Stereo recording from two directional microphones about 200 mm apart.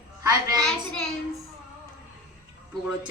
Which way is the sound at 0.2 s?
20° right (ahead or behind).